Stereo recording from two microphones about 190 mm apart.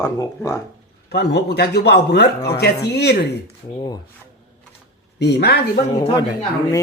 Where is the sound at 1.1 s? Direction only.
60° left (ahead or behind).